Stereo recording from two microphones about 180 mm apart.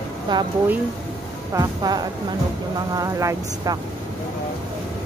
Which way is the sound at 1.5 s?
20° right (ahead or behind).